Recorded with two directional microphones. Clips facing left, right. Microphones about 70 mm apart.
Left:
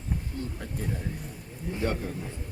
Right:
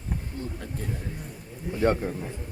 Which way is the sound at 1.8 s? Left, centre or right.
Right.